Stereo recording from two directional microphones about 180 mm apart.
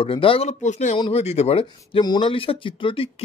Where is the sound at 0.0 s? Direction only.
30° left (ahead or behind).